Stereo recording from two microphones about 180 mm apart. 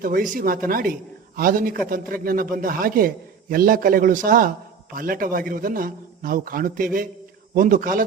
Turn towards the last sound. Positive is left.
turn(degrees=-50)  # may be behind; listen again after turning